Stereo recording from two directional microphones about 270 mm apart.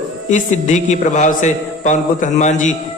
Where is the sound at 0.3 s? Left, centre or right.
Left.